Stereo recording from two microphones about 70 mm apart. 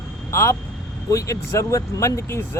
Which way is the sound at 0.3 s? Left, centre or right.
Left.